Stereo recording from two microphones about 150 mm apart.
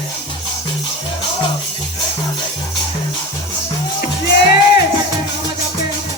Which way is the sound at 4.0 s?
90° left.